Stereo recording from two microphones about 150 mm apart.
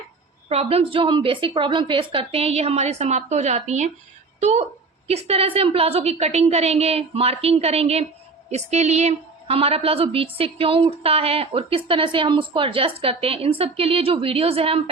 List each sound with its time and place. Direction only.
0.4 s a woman's voice: 45° right (ahead or behind)